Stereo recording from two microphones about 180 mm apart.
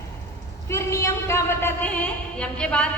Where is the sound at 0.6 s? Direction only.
15° left (ahead or behind).